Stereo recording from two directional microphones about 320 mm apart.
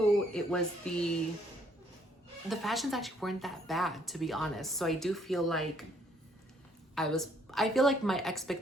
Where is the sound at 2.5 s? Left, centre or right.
Centre.